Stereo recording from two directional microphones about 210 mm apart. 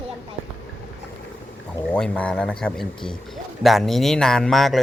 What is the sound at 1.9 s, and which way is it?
Speech, 5° left (ahead or behind).